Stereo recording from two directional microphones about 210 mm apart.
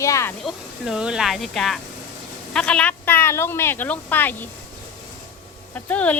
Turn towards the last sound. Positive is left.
turn(degrees=5)  # may be behind; listen again after turning